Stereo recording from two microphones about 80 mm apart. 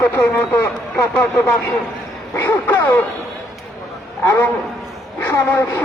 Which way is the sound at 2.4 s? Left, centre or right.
Left.